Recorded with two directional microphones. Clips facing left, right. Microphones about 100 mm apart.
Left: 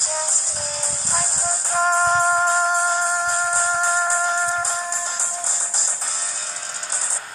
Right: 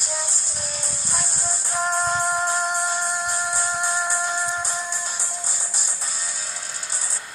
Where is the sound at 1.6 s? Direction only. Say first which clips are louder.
Left 5 dB; 40° left (ahead or behind).